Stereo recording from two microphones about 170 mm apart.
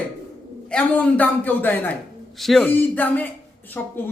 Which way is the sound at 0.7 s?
10° left (ahead or behind).